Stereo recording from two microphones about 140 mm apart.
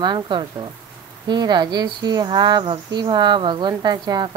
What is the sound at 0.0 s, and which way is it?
Speech, 35° right (ahead or behind).